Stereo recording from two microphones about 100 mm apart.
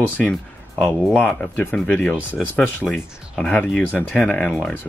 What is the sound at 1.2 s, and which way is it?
Speech, 10° left (ahead or behind).